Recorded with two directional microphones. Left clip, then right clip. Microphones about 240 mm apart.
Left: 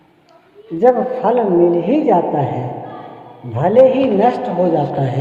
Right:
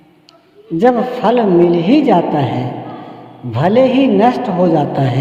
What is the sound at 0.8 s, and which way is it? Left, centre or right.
A man's voice, right.